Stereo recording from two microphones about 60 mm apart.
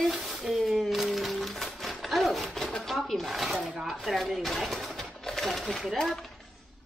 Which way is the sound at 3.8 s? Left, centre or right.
Centre.